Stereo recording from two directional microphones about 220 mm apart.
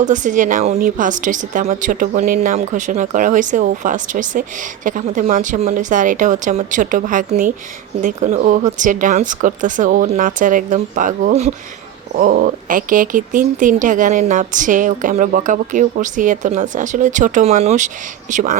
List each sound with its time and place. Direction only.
0.0 s a woman's voice: 35° right (ahead or behind)